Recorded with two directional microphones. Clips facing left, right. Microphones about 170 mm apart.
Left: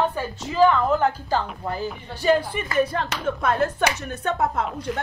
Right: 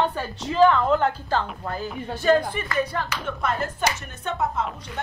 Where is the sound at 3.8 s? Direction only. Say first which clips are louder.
Left 3 dB; 60° left (ahead or behind).